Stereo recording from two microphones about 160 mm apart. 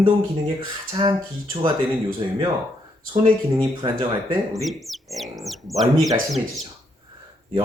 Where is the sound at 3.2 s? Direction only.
30° right (ahead or behind).